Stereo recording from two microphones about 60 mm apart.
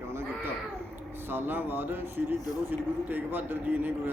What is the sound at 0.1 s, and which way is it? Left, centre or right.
Baby cry, right.